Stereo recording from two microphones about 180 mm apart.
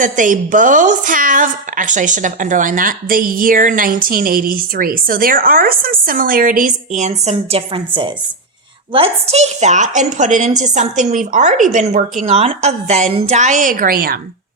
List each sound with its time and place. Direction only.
0.0 s a woman's voice: 45° right (ahead or behind)